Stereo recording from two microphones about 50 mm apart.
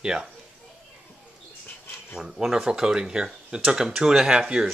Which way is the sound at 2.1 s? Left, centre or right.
Centre.